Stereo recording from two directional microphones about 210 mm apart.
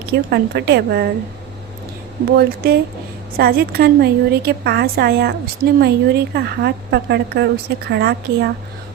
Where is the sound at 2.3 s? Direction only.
50° right (ahead or behind).